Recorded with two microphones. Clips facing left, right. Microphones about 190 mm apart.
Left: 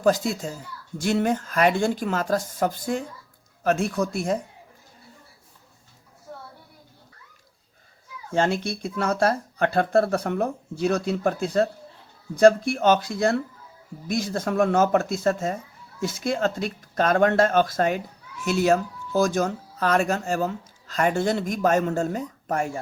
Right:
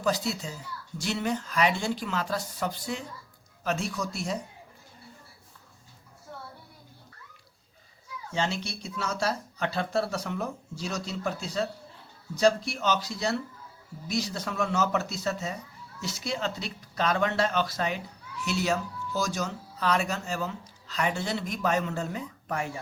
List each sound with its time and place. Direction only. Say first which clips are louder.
0.0 s speech: left 7 dB; 50° left (ahead or behind)
8.3 s speech: left 8 dB; 50° left (ahead or behind)